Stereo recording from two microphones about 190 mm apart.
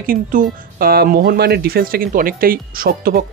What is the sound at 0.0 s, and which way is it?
Speech, 45° right (ahead or behind).